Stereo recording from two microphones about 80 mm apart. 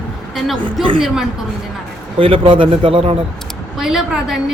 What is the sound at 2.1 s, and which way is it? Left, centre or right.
Speech, right.